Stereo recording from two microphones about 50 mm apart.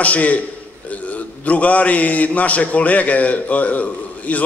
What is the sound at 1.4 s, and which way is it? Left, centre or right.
A man's voice, left.